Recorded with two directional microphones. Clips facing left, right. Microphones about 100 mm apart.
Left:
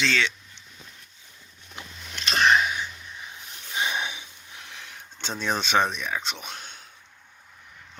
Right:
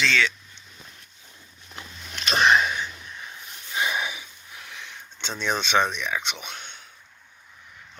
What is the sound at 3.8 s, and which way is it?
Wheeze, 25° left (ahead or behind).